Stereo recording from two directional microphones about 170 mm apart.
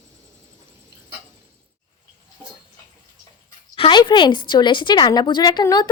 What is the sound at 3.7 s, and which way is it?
A woman's voice, 30° left (ahead or behind).